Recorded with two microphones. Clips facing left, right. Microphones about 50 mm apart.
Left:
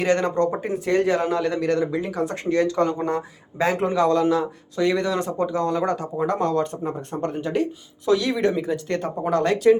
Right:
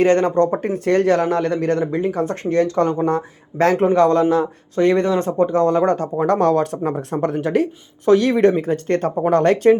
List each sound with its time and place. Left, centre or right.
0.0 s speech: right
0.6 s speech: right
3.5 s speech: right
3.9 s speech: right
8.0 s speech: right